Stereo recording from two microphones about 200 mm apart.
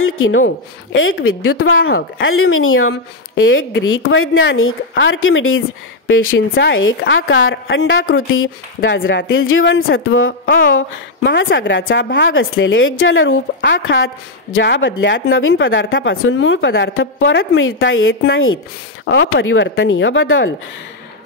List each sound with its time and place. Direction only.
0.0 s a woman's voice: 85° left
6.0 s a woman's voice: 80° left
10.8 s speech: 65° left (ahead or behind); by 13.4 s 85° left
13.6 s a woman's voice: 70° left (ahead or behind)
19.0 s speech: 70° left (ahead or behind)